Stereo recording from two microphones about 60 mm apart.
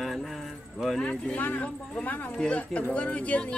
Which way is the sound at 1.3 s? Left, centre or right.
Left.